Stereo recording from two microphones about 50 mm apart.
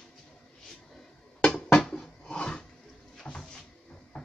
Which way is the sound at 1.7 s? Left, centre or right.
Centre.